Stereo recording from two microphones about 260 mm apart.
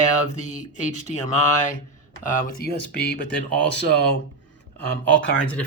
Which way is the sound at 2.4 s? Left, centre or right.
Left.